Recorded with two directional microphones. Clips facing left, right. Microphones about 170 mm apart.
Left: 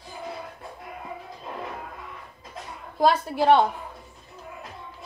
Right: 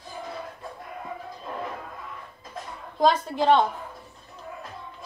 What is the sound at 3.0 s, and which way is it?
Speech, 10° left (ahead or behind).